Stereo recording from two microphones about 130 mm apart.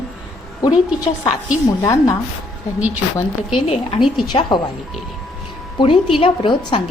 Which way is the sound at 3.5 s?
40° left (ahead or behind).